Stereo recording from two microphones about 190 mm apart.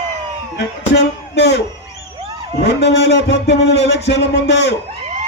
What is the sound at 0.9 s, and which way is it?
Speech, 60° left (ahead or behind).